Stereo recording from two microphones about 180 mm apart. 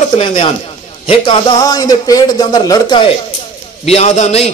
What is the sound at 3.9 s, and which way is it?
Speech, 35° left (ahead or behind).